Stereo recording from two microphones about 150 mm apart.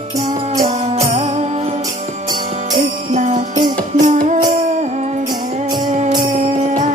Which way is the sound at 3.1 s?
55° right (ahead or behind).